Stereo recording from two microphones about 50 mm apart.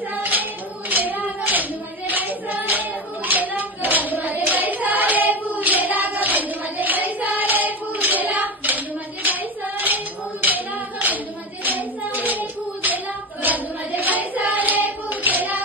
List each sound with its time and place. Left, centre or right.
0.1 s clapping: right
11.6 s music: right